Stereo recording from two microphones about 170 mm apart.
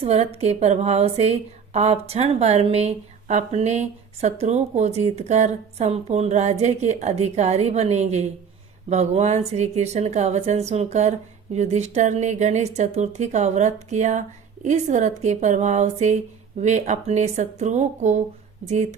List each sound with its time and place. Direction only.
0.0 s speech: 35° right (ahead or behind)